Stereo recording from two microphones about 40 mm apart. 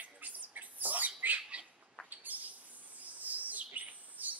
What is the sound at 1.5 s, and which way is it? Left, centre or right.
Bird, right.